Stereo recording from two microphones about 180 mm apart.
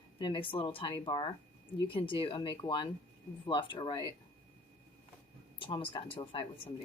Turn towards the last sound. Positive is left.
turn(degrees=30)  # may be behind; listen again after turning